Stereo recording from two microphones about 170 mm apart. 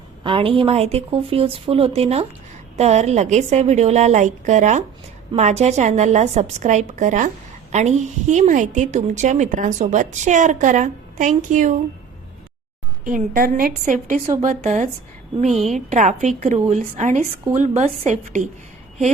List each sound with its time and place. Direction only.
0.2 s a woman's voice: 30° right (ahead or behind); by 11.8 s 45° right (ahead or behind)
13.1 s a woman's voice: 50° right (ahead or behind)